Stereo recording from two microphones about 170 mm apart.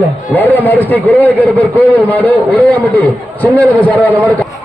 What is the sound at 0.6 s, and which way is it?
A man's voice, 10° left (ahead or behind).